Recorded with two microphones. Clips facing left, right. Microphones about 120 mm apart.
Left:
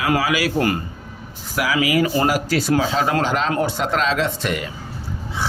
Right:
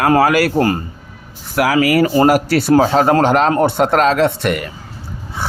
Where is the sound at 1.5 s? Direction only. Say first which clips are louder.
Right 6 dB; 60° right (ahead or behind).